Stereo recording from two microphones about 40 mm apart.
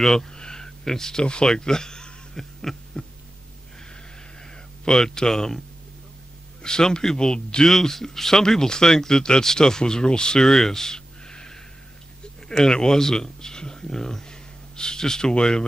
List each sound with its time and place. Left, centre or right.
0.0 s a sound: centre
1.2 s speech: left
2.7 s hum: centre
4.8 s speech: centre
6.6 s speech: centre
10.4 s a sound: centre
12.4 s speech: centre